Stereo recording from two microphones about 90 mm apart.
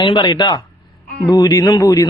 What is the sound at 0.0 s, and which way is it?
Speech, 60° left (ahead or behind).